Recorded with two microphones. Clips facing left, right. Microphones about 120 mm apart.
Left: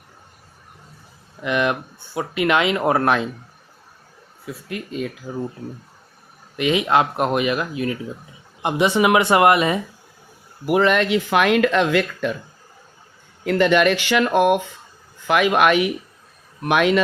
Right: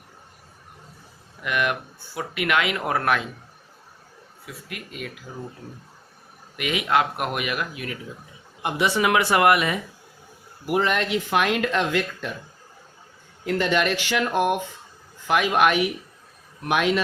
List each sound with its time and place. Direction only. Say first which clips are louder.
1.4 s speech: left 4 dB; 25° left (ahead or behind)
4.4 s speech: left 8 dB; 30° left (ahead or behind)
6.6 s speech: left 5 dB; 25° left (ahead or behind)
10.7 s speech: left 6 dB; 75° left (ahead or behind)
13.4 s speech: left 6 dB; 70° left (ahead or behind)